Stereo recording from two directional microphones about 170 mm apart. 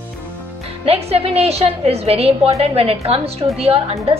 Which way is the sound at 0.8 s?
35° right (ahead or behind).